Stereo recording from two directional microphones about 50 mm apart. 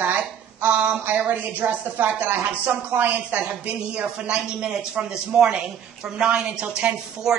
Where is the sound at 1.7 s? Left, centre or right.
Right.